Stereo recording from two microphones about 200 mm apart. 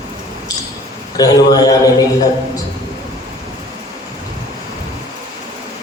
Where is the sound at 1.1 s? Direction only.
20° left (ahead or behind).